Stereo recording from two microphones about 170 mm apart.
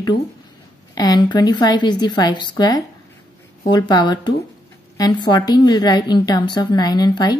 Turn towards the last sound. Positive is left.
turn(degrees=25)  # may be behind; listen again after turning